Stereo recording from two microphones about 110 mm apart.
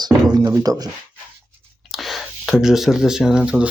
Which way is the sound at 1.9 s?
Centre (ahead or behind).